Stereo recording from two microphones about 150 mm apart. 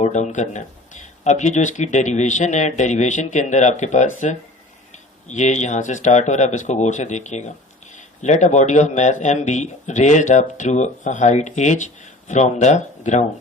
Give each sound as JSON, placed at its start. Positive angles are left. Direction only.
{"t": 0.0, "sound": "speech", "side_deg": 50}